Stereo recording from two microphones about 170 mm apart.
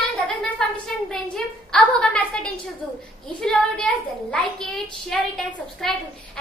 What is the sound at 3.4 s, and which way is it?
A woman's voice, 5° left (ahead or behind).